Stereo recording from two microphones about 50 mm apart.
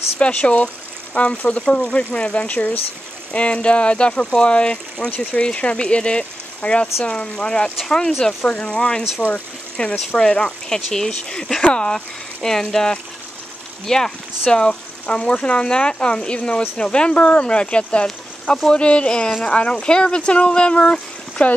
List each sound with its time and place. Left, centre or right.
0.2 s speech: left